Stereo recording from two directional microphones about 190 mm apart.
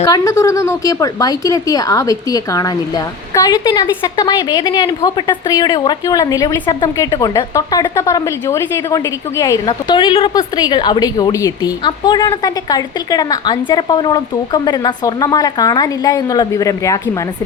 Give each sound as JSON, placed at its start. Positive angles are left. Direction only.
{"t": 0.0, "sound": "speech", "side_deg": 15}